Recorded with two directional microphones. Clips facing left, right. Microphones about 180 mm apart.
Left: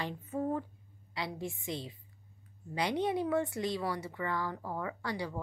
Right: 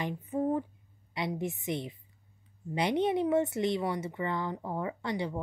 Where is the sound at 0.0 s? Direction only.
15° right (ahead or behind).